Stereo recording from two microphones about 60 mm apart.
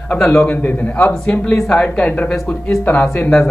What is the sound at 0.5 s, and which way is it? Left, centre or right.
Speech, left.